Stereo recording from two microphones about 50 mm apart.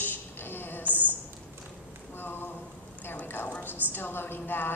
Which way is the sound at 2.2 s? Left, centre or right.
Left.